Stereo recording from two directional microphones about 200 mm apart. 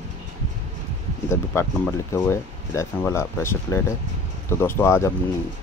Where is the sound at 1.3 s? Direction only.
15° left (ahead or behind).